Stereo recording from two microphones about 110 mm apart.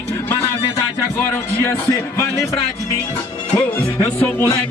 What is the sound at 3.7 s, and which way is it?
Music, 20° left (ahead or behind).